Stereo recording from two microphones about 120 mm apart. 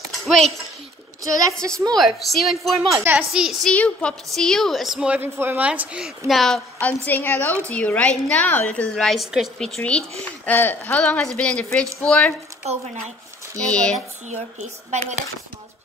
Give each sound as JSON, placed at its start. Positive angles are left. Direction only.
{"t": 1.2, "sound": "a woman's voice", "side_deg": -30}
{"t": 2.0, "sound": "a woman's voice", "side_deg": 0}
{"t": 2.9, "sound": "a child's voice", "side_deg": -20}
{"t": 3.6, "sound": "a woman's voice", "side_deg": 10}
{"t": 9.8, "sound": "a woman's voice", "side_deg": 10}
{"t": 13.6, "sound": "a woman's voice", "side_deg": 10}
{"t": 14.3, "sound": "speech", "side_deg": -75}